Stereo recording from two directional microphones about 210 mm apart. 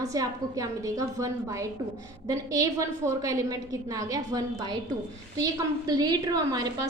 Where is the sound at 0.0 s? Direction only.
15° right (ahead or behind).